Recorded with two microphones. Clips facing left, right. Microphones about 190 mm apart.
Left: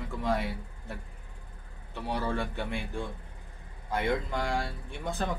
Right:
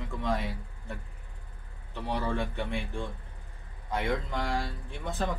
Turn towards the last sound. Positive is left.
turn(degrees=0)  # may be behind; listen again after turning